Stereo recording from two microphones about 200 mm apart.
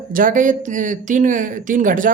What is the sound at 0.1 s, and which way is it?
Speech, 40° right (ahead or behind).